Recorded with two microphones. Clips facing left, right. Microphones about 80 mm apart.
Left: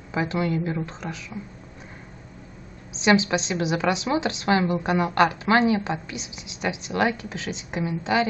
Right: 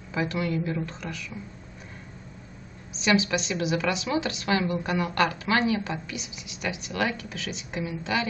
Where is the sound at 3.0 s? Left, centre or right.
Left.